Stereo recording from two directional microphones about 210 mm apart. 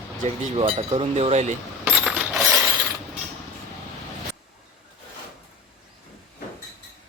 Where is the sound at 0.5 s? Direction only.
25° right (ahead or behind).